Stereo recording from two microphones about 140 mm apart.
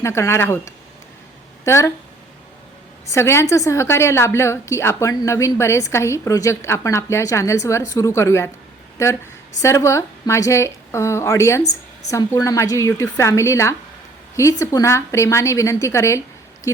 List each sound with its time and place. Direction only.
0.0 s a woman's voice: 20° left (ahead or behind)
3.1 s a woman's voice: 20° left (ahead or behind)